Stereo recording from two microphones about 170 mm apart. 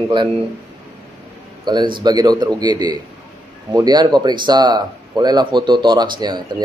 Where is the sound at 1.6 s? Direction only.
25° right (ahead or behind).